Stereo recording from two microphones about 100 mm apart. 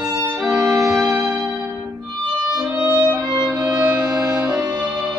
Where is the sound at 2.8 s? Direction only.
25° right (ahead or behind).